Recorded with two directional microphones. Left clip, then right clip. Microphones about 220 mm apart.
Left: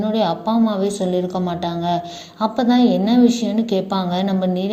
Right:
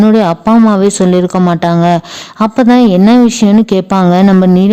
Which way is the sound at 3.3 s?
90° right.